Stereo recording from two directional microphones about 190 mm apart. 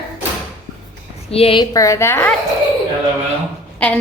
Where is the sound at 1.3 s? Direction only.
30° left (ahead or behind); by 2.3 s 10° left (ahead or behind).